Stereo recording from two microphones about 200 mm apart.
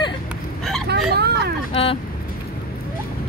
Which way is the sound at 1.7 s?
25° left (ahead or behind).